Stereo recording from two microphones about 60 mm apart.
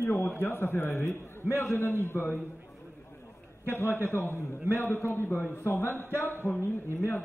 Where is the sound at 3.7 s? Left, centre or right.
Left.